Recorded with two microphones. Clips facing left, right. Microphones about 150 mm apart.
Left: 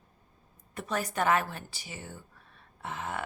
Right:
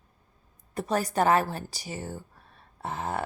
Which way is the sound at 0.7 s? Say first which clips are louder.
Right 6 dB; 35° right (ahead or behind).